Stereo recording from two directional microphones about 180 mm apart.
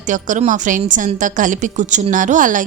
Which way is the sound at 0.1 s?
45° right (ahead or behind).